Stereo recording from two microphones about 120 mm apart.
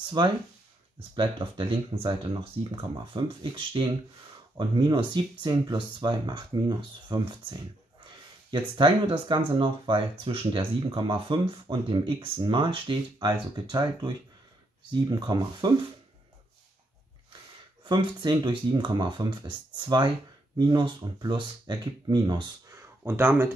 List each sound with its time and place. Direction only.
0.2 s speech: 40° right (ahead or behind)
8.5 s speech: 40° right (ahead or behind)
17.8 s speech: 40° right (ahead or behind)
23.0 s speech: 20° right (ahead or behind)